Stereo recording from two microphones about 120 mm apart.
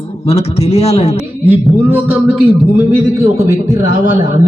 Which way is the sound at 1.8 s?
15° right (ahead or behind).